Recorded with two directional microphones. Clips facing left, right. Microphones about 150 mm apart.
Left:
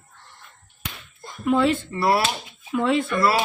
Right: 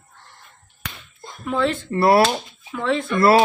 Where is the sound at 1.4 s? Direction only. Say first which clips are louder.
Left 2 dB; 10° left (ahead or behind).